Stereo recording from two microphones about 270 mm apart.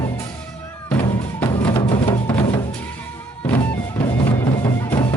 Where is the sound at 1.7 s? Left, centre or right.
Centre.